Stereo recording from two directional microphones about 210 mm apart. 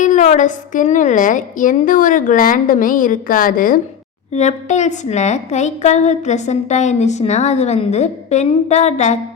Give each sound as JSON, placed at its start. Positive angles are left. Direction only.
{"t": 0.0, "sound": "a woman's voice", "side_deg": 35}